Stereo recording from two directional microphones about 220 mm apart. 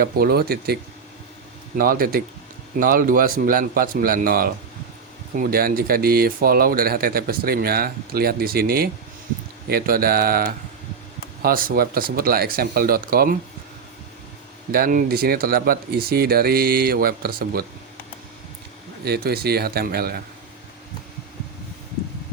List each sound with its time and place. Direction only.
0.0 s speech: 45° right (ahead or behind)
14.7 s speech: 40° right (ahead or behind)
19.0 s speech: 45° right (ahead or behind)